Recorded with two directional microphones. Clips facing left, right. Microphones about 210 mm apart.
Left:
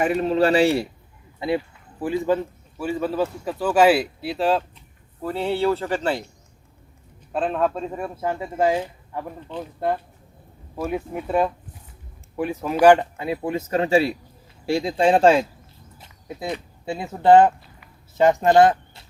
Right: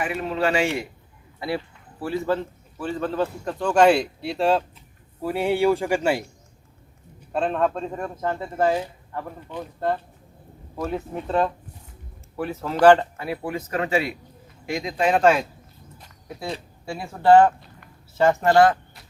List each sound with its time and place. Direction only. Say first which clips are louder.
0.0 s speech: left 5 dB; 40° left (ahead or behind)
1.4 s a sound: left 4 dB; 20° left (ahead or behind)
2.2 s a man's voice: left 3 dB; 15° left (ahead or behind)
5.2 s speech: right 2 dB; 10° right (ahead or behind)
7.3 s a man's voice: even; centre (ahead or behind); by 15.4 s 30° left (ahead or behind)
16.0 s a sound: left 3 dB; 20° left (ahead or behind)
16.8 s speech: left 1 dB; 20° left (ahead or behind)